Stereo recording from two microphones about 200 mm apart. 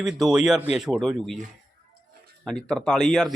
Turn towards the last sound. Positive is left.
turn(degrees=0)  # may be behind; listen again after turning